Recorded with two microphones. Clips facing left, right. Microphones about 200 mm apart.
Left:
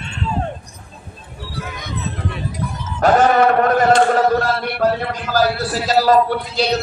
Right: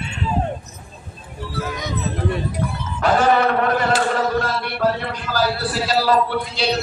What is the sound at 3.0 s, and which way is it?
Chant, 45° left (ahead or behind).